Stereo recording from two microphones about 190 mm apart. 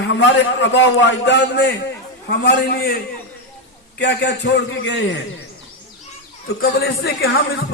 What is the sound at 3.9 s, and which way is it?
A man's voice, 60° left (ahead or behind).